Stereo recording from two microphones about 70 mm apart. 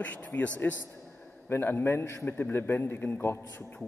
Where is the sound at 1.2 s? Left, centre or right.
Left.